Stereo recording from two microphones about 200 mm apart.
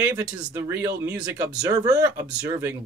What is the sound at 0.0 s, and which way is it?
Speech, 10° right (ahead or behind).